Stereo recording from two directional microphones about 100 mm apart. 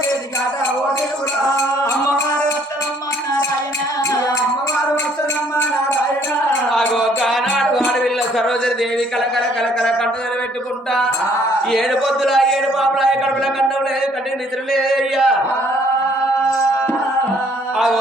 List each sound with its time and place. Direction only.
4.1 s music: 35° left (ahead or behind)
6.7 s music: centre (ahead or behind)
9.3 s speech: 5° left (ahead or behind)
11.7 s speech: 5° left (ahead or behind)
14.7 s speech: centre (ahead or behind)